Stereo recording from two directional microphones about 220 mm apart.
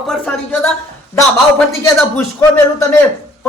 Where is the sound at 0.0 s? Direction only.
5° left (ahead or behind).